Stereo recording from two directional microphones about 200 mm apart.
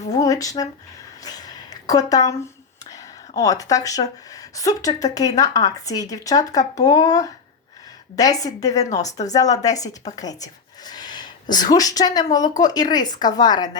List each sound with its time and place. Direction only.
0.2 s speech: 15° left (ahead or behind)
1.2 s a sound: 20° left (ahead or behind)
2.9 s a woman's voice: 15° left (ahead or behind)